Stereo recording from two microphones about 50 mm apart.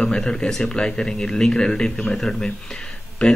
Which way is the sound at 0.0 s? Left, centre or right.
Centre.